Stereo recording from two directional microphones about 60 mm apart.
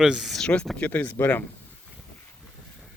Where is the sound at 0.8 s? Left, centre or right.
Left.